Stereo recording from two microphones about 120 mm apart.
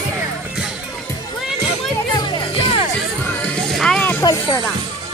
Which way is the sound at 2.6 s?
50° left (ahead or behind).